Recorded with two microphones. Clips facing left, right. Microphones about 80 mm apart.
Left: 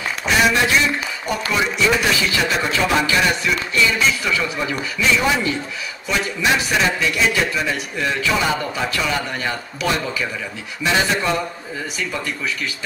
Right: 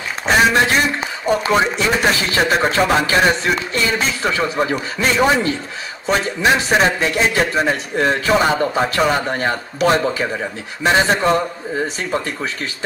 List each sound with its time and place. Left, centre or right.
0.3 s a man's voice: right